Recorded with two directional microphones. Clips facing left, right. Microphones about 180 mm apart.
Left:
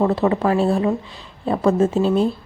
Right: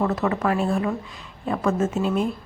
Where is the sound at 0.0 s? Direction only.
30° left (ahead or behind).